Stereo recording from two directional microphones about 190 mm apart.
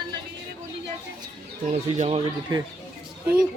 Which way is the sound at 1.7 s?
35° right (ahead or behind).